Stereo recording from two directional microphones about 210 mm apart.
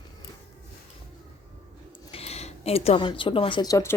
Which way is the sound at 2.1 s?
30° left (ahead or behind).